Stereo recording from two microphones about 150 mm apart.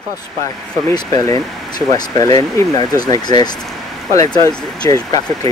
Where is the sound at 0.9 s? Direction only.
20° left (ahead or behind).